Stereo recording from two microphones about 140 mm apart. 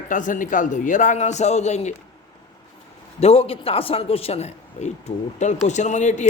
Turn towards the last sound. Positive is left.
turn(degrees=60)  # may be behind; listen again after turning